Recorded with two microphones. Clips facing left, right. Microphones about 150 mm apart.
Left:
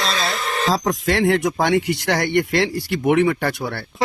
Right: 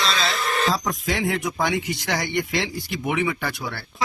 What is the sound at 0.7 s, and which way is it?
Speech, 75° left (ahead or behind).